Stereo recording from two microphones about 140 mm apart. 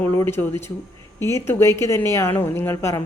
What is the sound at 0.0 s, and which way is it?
A woman's voice, 20° left (ahead or behind).